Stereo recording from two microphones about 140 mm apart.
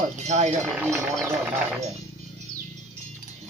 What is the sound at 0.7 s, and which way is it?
Speech, centre (ahead or behind).